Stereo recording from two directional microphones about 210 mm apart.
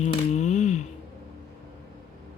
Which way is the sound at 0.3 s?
35° left (ahead or behind).